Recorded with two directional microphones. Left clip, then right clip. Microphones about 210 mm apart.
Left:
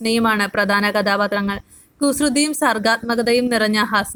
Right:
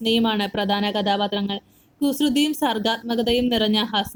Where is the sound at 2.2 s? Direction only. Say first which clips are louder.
Left 3 dB; 55° left (ahead or behind).